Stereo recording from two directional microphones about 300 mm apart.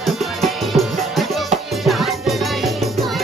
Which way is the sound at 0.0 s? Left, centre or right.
Centre.